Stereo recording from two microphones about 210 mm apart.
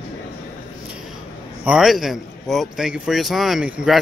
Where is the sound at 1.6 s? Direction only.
5° right (ahead or behind).